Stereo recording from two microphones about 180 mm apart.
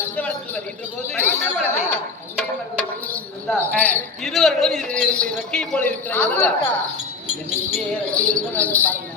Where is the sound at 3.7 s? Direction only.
10° left (ahead or behind).